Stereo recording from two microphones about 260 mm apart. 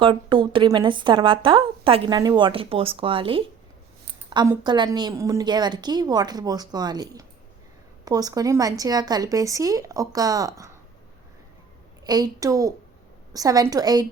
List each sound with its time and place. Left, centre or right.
0.0 s a woman's voice: centre
12.0 s a woman's voice: centre